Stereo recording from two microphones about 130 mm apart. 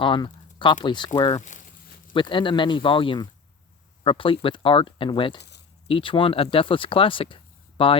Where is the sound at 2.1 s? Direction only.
40° left (ahead or behind).